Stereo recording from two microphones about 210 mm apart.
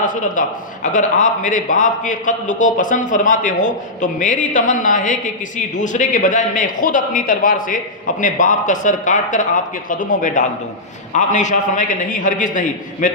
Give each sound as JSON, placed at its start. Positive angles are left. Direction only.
{"t": 0.0, "sound": "a man's voice", "side_deg": 40}